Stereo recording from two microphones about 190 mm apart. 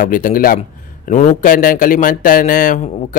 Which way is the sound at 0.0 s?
45° left (ahead or behind).